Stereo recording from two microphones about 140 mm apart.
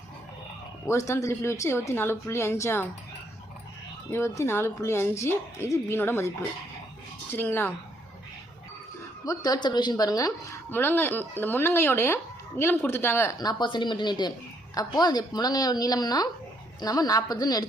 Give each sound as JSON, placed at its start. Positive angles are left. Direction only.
{"t": 0.9, "sound": "a woman's voice", "side_deg": 20}
{"t": 4.1, "sound": "a woman's voice", "side_deg": 20}
{"t": 7.3, "sound": "a woman's voice", "side_deg": 15}
{"t": 9.2, "sound": "a woman's voice", "side_deg": 25}